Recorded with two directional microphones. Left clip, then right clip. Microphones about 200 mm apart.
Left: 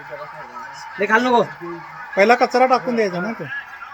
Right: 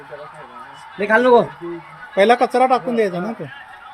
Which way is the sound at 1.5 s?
30° left (ahead or behind).